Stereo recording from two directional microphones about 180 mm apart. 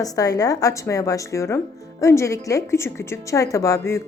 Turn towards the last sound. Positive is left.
turn(degrees=15)  # may be behind; listen again after turning